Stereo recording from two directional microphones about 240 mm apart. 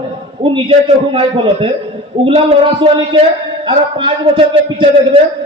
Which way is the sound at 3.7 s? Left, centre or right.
Right.